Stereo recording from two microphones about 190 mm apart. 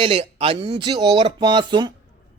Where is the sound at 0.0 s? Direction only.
30° right (ahead or behind).